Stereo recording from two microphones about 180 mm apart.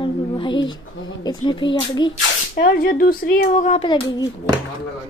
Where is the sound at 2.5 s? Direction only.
50° left (ahead or behind).